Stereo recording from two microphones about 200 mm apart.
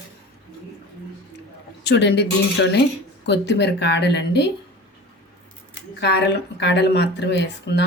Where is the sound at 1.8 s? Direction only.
60° left (ahead or behind).